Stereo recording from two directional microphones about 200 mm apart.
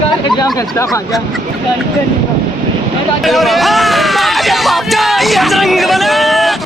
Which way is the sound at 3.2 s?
Centre (ahead or behind).